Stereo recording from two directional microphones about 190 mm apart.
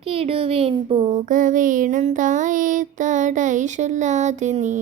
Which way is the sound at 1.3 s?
45° right (ahead or behind).